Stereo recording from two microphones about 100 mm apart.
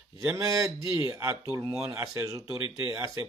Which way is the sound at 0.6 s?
35° right (ahead or behind).